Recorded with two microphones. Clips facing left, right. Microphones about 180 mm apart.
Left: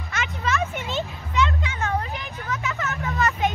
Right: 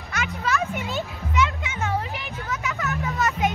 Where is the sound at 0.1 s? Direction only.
Centre (ahead or behind).